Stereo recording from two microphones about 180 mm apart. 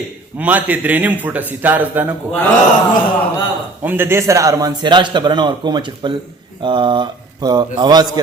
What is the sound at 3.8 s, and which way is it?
A man's voice, 10° right (ahead or behind).